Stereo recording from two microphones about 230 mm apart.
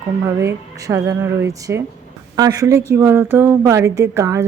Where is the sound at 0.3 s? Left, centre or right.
Centre.